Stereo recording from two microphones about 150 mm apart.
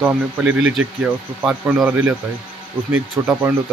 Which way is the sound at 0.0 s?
10° right (ahead or behind).